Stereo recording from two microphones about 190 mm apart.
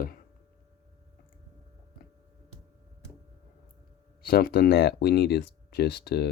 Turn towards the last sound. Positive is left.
turn(degrees=60)  # may be behind; listen again after turning